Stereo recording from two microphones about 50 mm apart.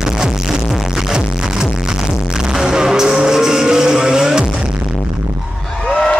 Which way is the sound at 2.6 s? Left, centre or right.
Centre.